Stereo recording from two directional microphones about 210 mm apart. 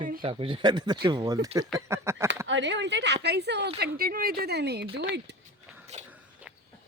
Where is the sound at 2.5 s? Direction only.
60° right (ahead or behind).